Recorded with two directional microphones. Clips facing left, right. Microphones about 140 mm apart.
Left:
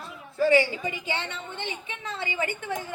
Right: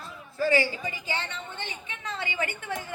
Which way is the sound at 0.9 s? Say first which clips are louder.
Left 2 dB; 35° right (ahead or behind).